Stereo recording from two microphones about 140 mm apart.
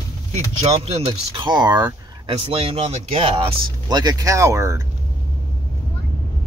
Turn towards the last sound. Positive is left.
turn(degrees=-20)  # may be behind; listen again after turning